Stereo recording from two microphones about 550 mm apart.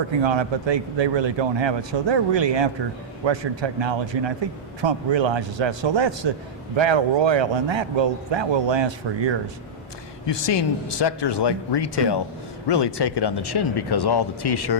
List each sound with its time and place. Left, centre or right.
0.2 s a man's voice: right
10.2 s speech: left